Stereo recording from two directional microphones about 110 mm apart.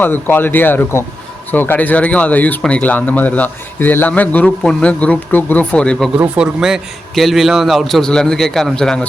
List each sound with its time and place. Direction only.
0.0 s speech: 20° left (ahead or behind)
6.1 s a man's voice: 10° right (ahead or behind)